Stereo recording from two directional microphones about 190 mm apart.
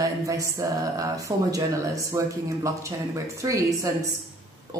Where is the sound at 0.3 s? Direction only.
15° right (ahead or behind).